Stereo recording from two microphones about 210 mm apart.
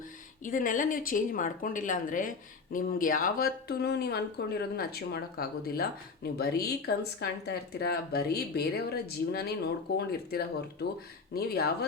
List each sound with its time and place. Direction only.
0.4 s a woman's voice: 40° left (ahead or behind)